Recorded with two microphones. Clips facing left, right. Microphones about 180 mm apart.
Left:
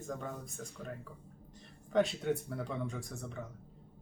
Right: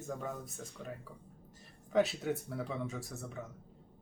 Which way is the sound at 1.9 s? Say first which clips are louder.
Even; 5° right (ahead or behind).